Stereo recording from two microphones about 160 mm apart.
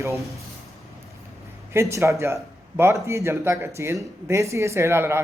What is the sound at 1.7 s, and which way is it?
Speech, 20° right (ahead or behind).